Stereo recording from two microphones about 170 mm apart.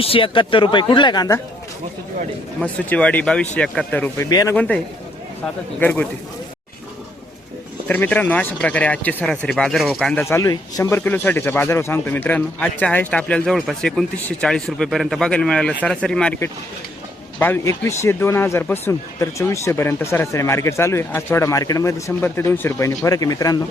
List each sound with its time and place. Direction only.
0.0 s speech: 30° left (ahead or behind)
2.6 s speech: 5° left (ahead or behind)
4.3 s speech: 20° left (ahead or behind)
4.5 s speech: 10° left (ahead or behind)
5.8 s speech: 10° left (ahead or behind)
7.9 s speech: 10° left (ahead or behind)
10.2 s speech: 20° left (ahead or behind)
17.4 s speech: 15° left (ahead or behind)